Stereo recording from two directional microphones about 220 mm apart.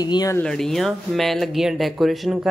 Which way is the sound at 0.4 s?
Centre (ahead or behind).